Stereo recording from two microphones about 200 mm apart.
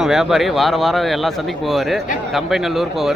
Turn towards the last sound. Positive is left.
turn(degrees=0)  # may be behind; listen again after turning